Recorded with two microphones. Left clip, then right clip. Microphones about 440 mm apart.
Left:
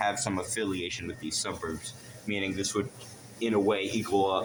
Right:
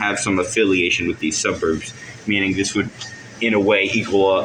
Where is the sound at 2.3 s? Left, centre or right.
Left.